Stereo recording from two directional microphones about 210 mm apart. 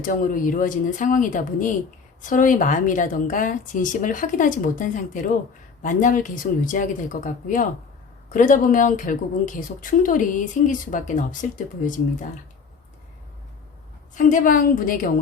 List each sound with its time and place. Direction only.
0.0 s speech: 40° left (ahead or behind)
14.2 s speech: 40° left (ahead or behind)